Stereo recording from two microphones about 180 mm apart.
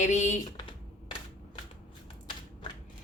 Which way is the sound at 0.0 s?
40° left (ahead or behind).